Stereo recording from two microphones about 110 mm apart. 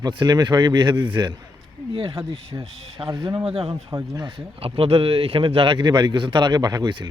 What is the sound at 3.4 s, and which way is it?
Speech, 60° right (ahead or behind).